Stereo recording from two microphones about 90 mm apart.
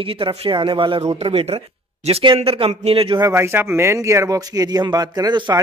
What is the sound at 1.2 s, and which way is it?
Speech, 90° right.